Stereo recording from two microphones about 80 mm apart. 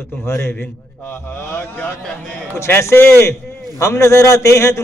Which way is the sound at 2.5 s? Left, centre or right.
Left.